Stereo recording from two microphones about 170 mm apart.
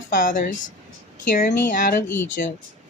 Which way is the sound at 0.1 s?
50° left (ahead or behind).